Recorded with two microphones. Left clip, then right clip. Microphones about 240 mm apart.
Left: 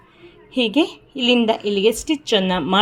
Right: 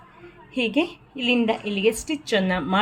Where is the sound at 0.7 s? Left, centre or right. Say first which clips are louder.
Left 5 dB; left.